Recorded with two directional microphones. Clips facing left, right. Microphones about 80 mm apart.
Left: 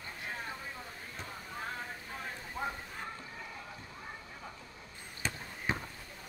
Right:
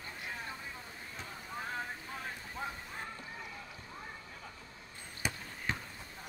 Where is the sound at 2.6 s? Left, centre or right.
Centre.